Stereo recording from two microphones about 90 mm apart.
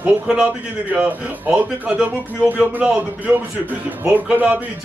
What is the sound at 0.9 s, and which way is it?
A man's voice, 15° right (ahead or behind).